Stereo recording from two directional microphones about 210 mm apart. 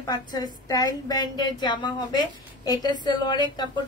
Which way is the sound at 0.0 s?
20° left (ahead or behind).